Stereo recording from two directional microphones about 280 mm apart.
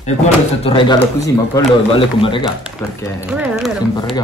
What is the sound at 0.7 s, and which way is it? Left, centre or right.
Speech, centre.